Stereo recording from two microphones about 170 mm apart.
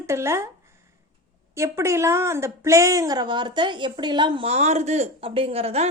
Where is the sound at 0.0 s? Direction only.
15° right (ahead or behind).